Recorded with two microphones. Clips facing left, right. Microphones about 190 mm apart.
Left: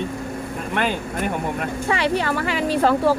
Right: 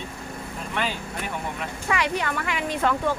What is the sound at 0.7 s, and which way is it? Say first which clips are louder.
Speech: left 6 dB; 55° left (ahead or behind).